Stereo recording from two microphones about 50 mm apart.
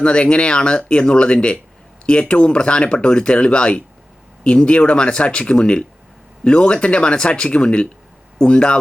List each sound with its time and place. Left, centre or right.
0.0 s speech: centre